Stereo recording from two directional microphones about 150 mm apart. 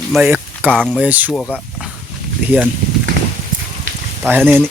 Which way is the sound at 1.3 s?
5° left (ahead or behind).